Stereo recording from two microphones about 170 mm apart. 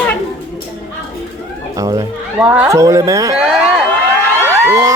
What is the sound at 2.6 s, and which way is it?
Speech, 15° right (ahead or behind).